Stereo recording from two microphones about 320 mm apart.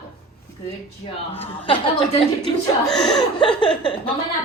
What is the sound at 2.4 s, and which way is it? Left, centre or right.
Speech, centre.